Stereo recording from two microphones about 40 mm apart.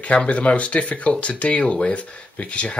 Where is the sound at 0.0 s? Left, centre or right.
Left.